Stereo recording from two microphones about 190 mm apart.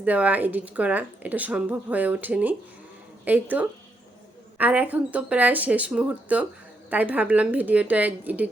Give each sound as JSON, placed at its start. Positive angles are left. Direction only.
{"t": 0.0, "sound": "speech", "side_deg": -10}
{"t": 4.5, "sound": "speech", "side_deg": -10}